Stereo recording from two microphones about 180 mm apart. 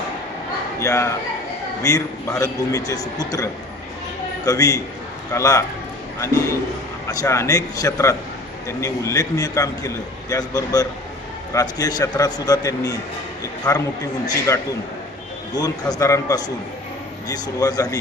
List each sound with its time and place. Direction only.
0.8 s a man's voice: 15° left (ahead or behind)
7.1 s a man's voice: 20° left (ahead or behind)
14.3 s a man's voice: 15° left (ahead or behind)